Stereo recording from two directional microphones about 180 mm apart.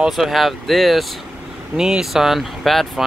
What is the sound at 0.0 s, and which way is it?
Speech, centre (ahead or behind).